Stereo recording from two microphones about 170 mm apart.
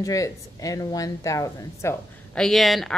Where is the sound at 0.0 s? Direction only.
20° left (ahead or behind).